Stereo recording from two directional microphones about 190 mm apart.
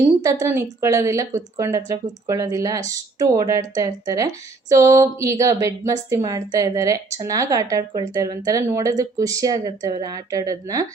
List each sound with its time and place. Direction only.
0.2 s speech: 15° right (ahead or behind)